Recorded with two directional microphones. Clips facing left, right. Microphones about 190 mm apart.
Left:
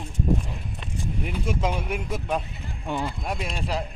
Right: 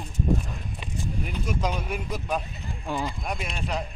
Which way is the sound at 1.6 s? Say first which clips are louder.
Left 2 dB; 5° left (ahead or behind).